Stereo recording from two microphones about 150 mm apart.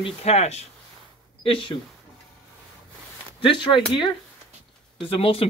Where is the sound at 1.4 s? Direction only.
35° left (ahead or behind).